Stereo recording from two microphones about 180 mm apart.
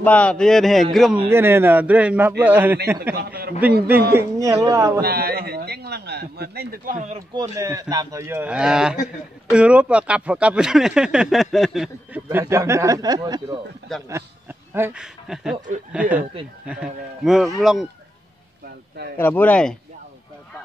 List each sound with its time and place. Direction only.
0.0 s speech: 5° left (ahead or behind)
1.3 s a man's voice: 15° right (ahead or behind)
3.2 s a man's voice: 60° right (ahead or behind)
4.2 s a man's voice: 15° right (ahead or behind)
5.0 s a sound: 60° right (ahead or behind); by 7.2 s 45° right (ahead or behind)
7.3 s a man's voice: 20° right (ahead or behind); by 12.2 s centre (ahead or behind)
12.3 s a man's voice: 15° right (ahead or behind)
13.9 s a man's voice: centre (ahead or behind)
19.1 s speech: 10° left (ahead or behind)